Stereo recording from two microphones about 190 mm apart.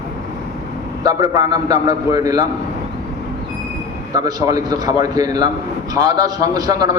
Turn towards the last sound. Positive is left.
turn(degrees=-20)  # may be behind; listen again after turning